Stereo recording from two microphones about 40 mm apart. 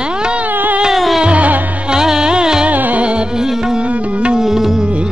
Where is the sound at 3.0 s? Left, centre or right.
Right.